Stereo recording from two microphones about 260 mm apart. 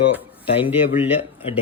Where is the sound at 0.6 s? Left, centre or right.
Left.